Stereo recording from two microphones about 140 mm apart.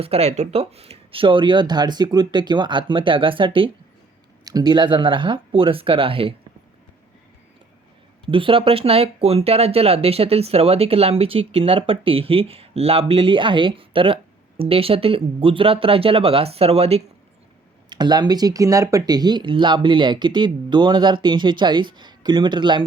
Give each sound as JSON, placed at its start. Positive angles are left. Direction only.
{"t": 0.0, "sound": "speech", "side_deg": -45}
{"t": 8.2, "sound": "speech", "side_deg": -40}
{"t": 17.8, "sound": "speech", "side_deg": -30}